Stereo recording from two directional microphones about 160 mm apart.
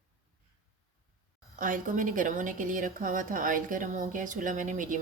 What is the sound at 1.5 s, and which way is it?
A woman's voice, 55° right (ahead or behind).